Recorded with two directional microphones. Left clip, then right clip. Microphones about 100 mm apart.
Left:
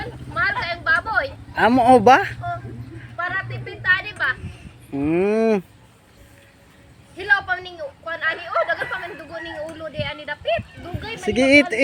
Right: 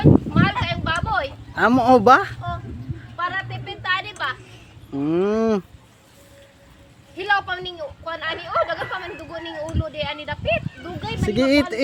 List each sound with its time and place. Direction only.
0.0 s a sound: 15° right (ahead or behind)
1.7 s speech: 10° right (ahead or behind)
3.2 s a sound: 15° right (ahead or behind)
5.0 s speech: 10° right (ahead or behind)
7.2 s speech: 15° right (ahead or behind)
11.3 s speech: centre (ahead or behind)